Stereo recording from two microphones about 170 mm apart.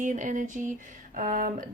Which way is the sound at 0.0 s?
50° right (ahead or behind).